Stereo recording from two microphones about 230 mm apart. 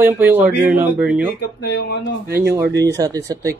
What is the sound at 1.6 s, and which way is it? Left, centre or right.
Speech, left.